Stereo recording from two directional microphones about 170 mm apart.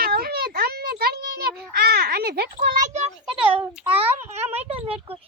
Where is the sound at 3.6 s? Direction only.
10° right (ahead or behind).